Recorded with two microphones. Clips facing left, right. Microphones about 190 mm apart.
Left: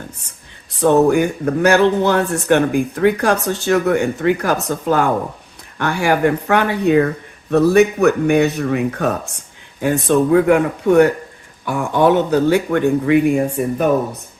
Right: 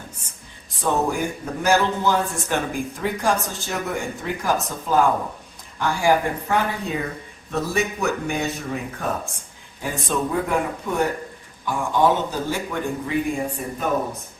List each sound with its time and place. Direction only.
0.8 s speech: 70° left (ahead or behind)